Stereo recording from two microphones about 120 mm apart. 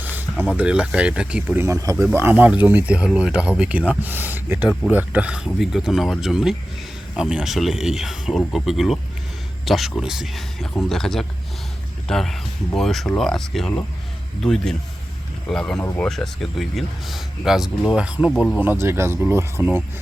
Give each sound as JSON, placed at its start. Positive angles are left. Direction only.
{"t": 0.0, "sound": "a sound", "side_deg": -15}
{"t": 0.5, "sound": "speech", "side_deg": -10}
{"t": 1.6, "sound": "speech", "side_deg": -25}